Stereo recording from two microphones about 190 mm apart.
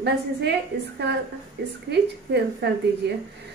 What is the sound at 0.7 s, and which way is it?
Speech, 55° right (ahead or behind).